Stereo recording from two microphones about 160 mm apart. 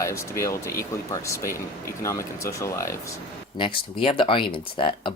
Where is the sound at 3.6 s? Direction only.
35° left (ahead or behind).